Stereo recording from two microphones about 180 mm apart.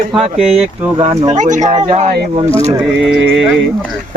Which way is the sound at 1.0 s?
35° right (ahead or behind).